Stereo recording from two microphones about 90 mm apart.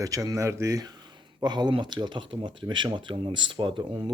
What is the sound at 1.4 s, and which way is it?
Speech, 50° right (ahead or behind).